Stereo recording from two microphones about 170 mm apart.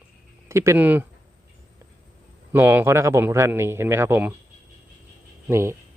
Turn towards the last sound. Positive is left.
turn(degrees=-15)  # may be behind; listen again after turning